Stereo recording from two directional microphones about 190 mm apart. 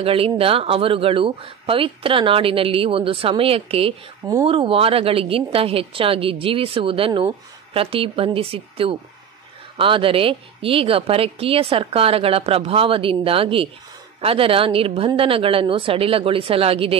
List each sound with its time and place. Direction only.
0.0 s speech: 30° right (ahead or behind)